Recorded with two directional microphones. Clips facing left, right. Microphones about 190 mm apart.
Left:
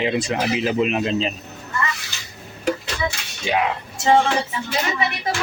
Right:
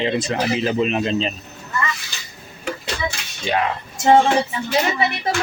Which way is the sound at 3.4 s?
10° left (ahead or behind).